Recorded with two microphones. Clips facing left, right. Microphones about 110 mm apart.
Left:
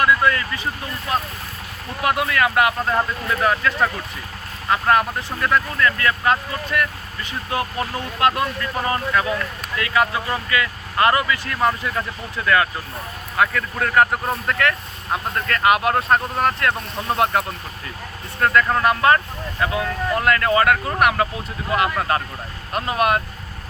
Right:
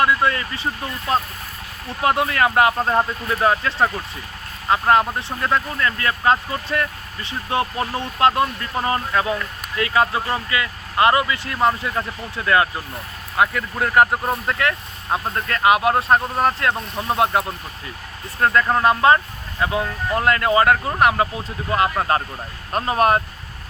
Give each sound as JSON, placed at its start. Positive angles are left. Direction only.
{"t": 0.0, "sound": "speech", "side_deg": -25}